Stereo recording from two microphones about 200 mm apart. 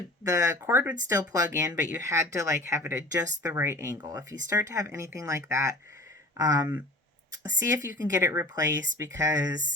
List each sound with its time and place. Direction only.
0.3 s speech: 15° right (ahead or behind)
7.9 s speech: 15° right (ahead or behind)